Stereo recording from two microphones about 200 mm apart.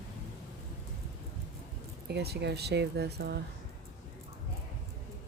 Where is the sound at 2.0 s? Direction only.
55° right (ahead or behind).